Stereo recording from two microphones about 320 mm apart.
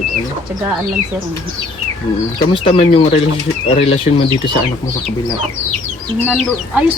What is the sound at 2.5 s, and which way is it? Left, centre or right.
Speech, centre.